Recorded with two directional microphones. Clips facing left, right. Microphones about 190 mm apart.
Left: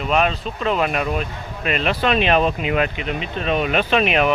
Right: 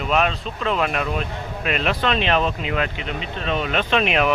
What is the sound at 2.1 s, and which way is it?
Speech, 15° left (ahead or behind).